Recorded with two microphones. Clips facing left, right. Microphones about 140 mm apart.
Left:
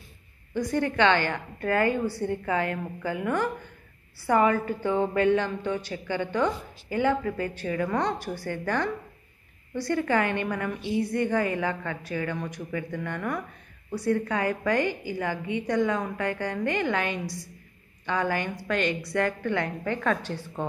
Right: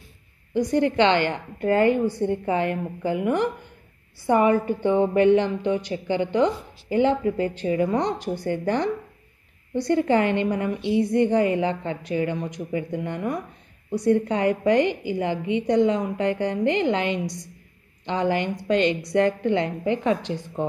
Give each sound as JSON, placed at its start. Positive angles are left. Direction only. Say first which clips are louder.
{"t": 0.6, "sound": "a woman's voice", "louder": "right 5 dB", "side_deg": -20}